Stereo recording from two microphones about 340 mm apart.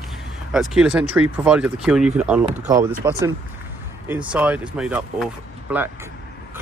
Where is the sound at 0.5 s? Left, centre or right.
Centre.